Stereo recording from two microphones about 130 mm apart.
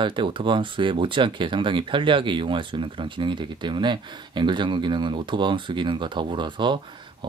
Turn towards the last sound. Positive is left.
turn(degrees=-35)  # may be behind; listen again after turning